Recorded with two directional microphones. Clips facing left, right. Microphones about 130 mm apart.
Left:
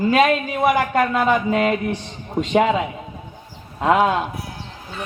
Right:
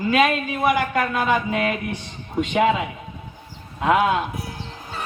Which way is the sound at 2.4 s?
45° left (ahead or behind).